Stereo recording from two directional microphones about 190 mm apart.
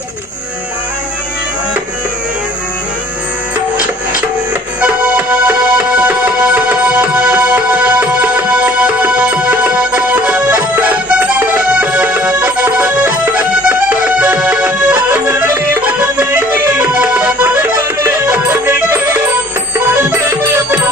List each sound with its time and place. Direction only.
4.8 s music: 5° right (ahead or behind)